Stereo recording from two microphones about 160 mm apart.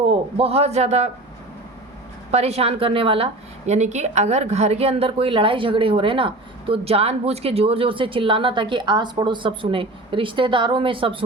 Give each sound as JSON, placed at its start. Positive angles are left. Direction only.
{"t": 0.1, "sound": "a woman's voice", "side_deg": -35}
{"t": 2.3, "sound": "a woman's voice", "side_deg": -40}